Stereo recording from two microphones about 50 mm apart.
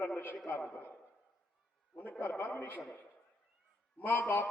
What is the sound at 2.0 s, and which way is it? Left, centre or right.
Speech, left.